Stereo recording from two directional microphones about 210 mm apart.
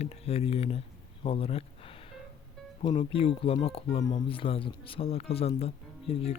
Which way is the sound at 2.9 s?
25° left (ahead or behind).